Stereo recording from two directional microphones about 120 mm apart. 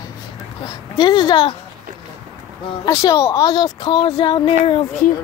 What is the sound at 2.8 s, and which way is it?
Speech, 30° left (ahead or behind).